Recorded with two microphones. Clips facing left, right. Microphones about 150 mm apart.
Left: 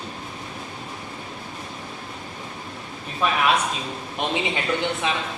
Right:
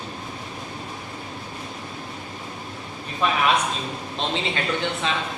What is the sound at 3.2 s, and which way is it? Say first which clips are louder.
Speech: even; centre (ahead or behind).